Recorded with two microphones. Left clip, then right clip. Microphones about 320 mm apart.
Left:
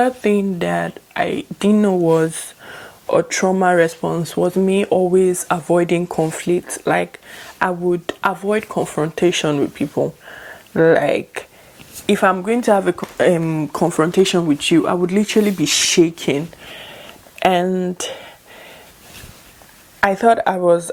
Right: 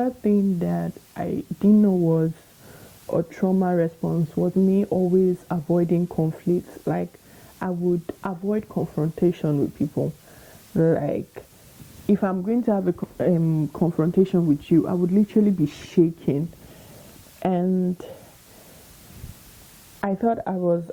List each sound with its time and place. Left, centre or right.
0.0 s speech: centre
4.0 s speech: centre
17.4 s speech: centre
20.0 s speech: centre